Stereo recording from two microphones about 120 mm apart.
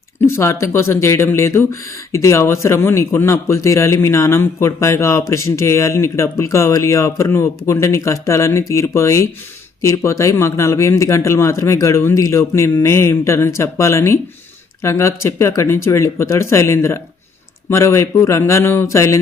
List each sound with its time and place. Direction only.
0.2 s speech: 20° left (ahead or behind)